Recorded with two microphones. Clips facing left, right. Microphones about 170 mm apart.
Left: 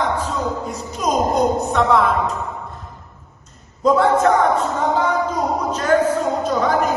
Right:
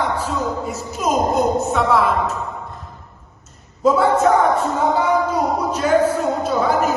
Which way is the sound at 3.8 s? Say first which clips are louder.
Even; 5° right (ahead or behind).